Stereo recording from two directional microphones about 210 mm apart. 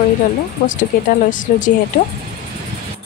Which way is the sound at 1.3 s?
40° left (ahead or behind).